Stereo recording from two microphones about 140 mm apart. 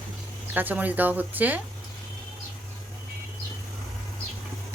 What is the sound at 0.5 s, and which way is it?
Speech, 10° right (ahead or behind).